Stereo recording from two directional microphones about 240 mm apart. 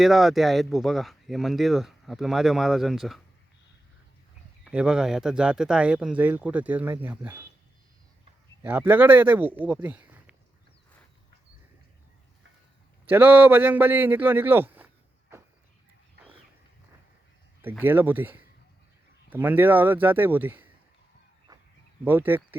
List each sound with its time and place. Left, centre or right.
0.0 s speech: centre
4.6 s speech: centre
8.6 s a man's voice: centre
13.1 s a man's voice: centre
17.6 s a man's voice: centre
21.5 s a sound: centre
22.0 s a man's voice: centre